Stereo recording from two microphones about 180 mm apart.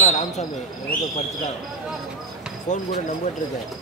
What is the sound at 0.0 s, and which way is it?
Speech, 40° left (ahead or behind).